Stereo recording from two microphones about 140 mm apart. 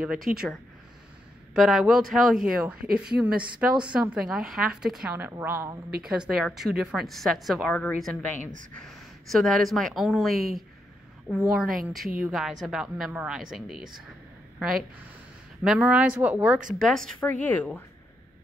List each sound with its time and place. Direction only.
0.0 s a woman's voice: 5° right (ahead or behind)
1.5 s a woman's voice: centre (ahead or behind); by 5.8 s 15° right (ahead or behind)
6.0 s a woman's voice: 5° right (ahead or behind)
16.9 s speech: 5° left (ahead or behind)